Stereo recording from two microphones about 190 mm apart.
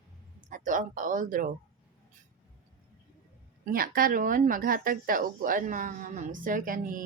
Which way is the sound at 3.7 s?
50° right (ahead or behind).